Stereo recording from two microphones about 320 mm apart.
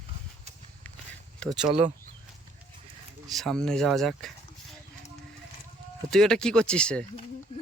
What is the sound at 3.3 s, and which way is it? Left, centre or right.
Speech, centre.